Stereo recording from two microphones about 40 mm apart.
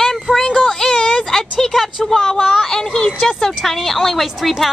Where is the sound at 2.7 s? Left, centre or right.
Centre.